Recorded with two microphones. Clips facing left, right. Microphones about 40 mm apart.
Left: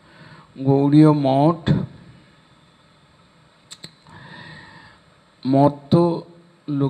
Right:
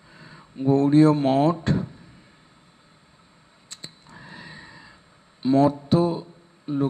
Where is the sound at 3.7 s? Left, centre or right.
Centre.